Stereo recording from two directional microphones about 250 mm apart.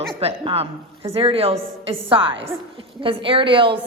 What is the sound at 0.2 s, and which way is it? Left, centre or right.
A woman's voice, right.